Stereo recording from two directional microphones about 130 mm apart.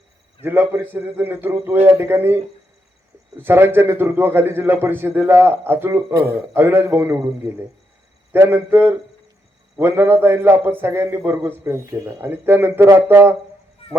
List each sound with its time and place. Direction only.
0.4 s a man's voice: 15° right (ahead or behind)
3.4 s a man's voice: 15° right (ahead or behind)